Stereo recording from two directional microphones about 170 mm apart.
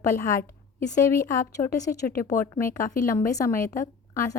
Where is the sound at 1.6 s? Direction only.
30° left (ahead or behind).